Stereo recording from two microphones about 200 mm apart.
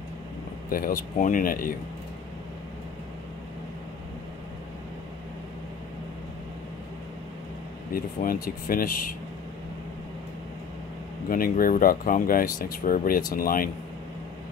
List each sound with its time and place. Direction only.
0.7 s speech: 45° left (ahead or behind)
7.9 s speech: 45° left (ahead or behind)
11.2 s speech: 45° left (ahead or behind)